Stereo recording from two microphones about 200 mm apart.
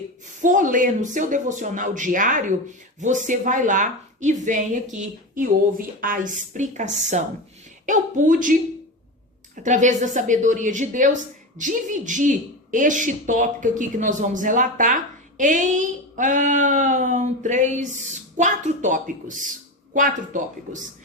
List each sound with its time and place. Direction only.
0.4 s speech: 40° right (ahead or behind)
9.6 s speech: 40° right (ahead or behind)